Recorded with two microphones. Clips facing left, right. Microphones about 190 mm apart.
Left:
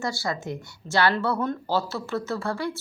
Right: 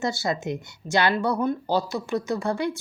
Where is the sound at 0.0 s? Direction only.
20° right (ahead or behind).